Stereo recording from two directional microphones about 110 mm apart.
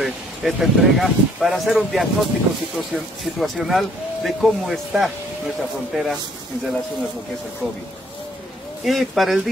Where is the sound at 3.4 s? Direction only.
Centre (ahead or behind).